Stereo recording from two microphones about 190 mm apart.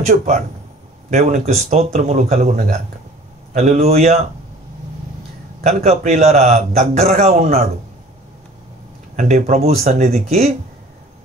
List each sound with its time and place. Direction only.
0.0 s a man's voice: 35° right (ahead or behind)
5.6 s a man's voice: 35° right (ahead or behind)
9.1 s a man's voice: 40° right (ahead or behind)